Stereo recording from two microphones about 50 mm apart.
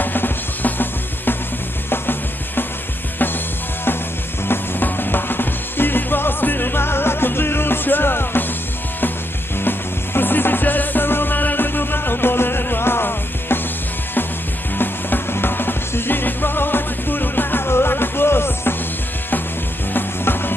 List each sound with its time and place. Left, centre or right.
0.0 s music: left
4.5 s music: left
9.6 s music: left
14.8 s music: left
19.9 s music: left